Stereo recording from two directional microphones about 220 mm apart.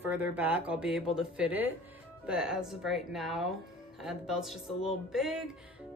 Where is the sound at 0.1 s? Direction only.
5° right (ahead or behind).